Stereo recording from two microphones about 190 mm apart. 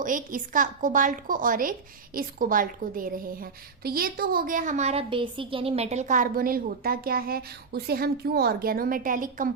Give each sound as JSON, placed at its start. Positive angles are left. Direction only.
{"t": 0.0, "sound": "a woman's voice", "side_deg": -45}